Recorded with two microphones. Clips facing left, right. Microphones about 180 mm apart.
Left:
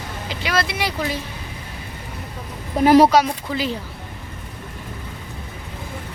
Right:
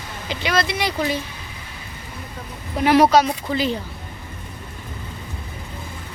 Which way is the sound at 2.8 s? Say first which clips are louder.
Left 3 dB; 40° left (ahead or behind).